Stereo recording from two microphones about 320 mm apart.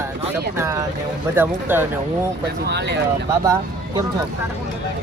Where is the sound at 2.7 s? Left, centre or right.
Right.